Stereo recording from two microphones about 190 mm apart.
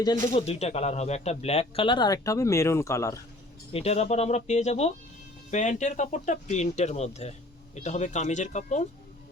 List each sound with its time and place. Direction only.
0.0 s speech: 25° left (ahead or behind)
3.7 s speech: 30° left (ahead or behind)